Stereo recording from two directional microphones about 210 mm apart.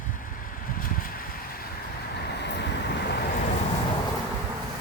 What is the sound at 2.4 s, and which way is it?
Vehicle, 55° left (ahead or behind).